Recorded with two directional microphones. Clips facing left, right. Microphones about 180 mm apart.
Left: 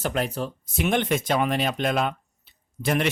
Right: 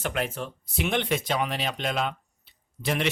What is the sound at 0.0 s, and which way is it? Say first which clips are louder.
Speech: left 3 dB; 35° left (ahead or behind).